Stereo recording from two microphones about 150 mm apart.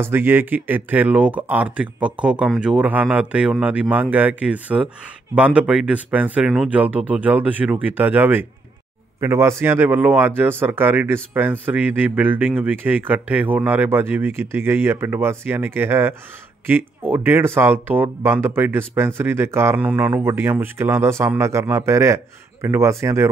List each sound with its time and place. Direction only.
0.0 s speech: 15° right (ahead or behind)